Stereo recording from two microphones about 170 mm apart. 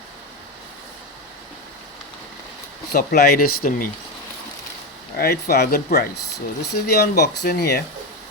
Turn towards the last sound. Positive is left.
turn(degrees=70)  # may be behind; listen again after turning